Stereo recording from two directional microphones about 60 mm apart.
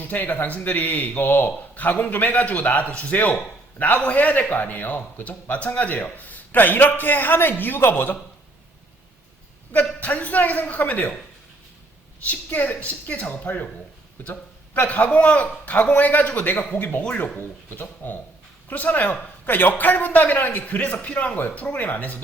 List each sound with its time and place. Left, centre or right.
0.0 s a man's voice: left
10.0 s a man's voice: left
12.2 s a man's voice: left
17.3 s a man's voice: left